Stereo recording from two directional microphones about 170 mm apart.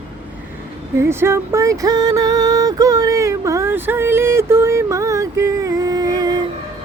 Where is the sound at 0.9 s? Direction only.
15° right (ahead or behind).